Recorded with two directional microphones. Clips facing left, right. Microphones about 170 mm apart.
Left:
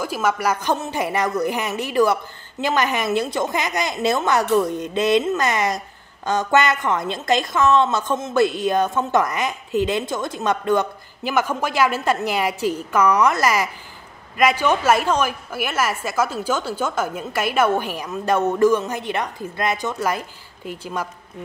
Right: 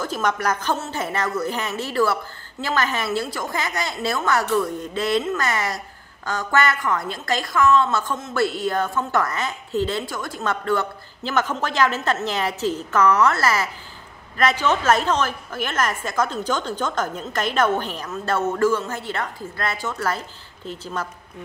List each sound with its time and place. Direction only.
0.0 s a woman's voice: 10° left (ahead or behind)